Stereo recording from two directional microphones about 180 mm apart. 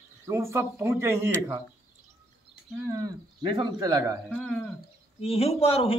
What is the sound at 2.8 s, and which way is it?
A man's voice, 20° right (ahead or behind).